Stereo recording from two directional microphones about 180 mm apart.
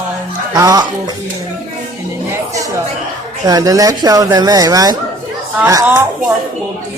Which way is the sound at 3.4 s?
20° right (ahead or behind).